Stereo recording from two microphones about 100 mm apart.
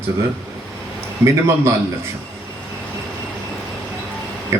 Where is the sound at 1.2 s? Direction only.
30° right (ahead or behind).